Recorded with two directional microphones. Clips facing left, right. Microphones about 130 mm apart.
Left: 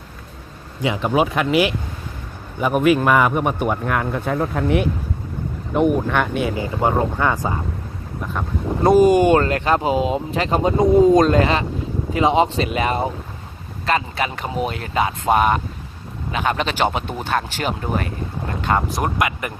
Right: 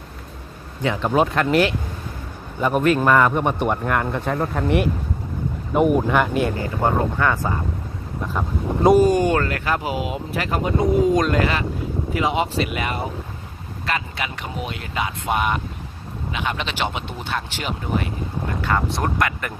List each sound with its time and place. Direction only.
0.8 s a man's voice: 10° left (ahead or behind)
6.8 s speech: 15° left (ahead or behind)
8.3 s a man's voice: centre (ahead or behind)
9.0 s speech: 20° left (ahead or behind); by 18.0 s 45° left (ahead or behind)
18.7 s speech: 30° left (ahead or behind)
19.0 s speech: 15° left (ahead or behind)